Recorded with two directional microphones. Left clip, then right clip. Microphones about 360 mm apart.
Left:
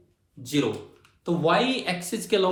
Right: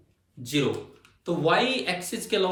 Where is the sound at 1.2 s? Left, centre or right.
Centre.